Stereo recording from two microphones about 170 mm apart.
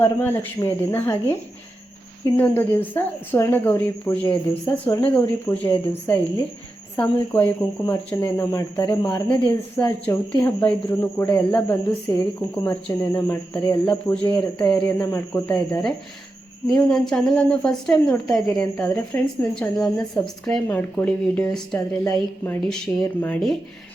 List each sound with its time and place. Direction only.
0.0 s a woman's voice: 15° left (ahead or behind)
10.4 s a woman's voice: 10° left (ahead or behind)